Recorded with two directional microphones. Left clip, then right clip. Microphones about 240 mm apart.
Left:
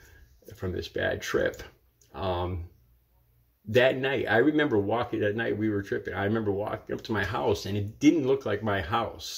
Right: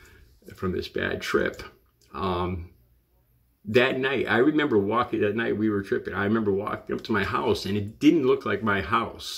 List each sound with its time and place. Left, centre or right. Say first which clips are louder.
0.6 s speech: right 3 dB; centre
3.7 s speech: right 1 dB; centre